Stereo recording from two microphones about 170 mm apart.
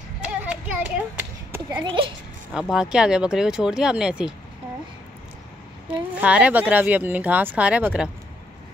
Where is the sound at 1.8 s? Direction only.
30° right (ahead or behind).